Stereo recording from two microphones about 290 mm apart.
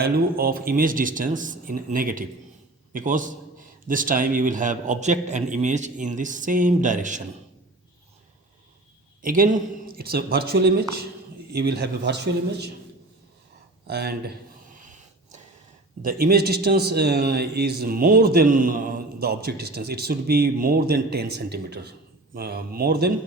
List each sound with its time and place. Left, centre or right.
0.0 s a man's voice: right
9.2 s a man's voice: right
13.8 s a man's voice: right
16.0 s a man's voice: right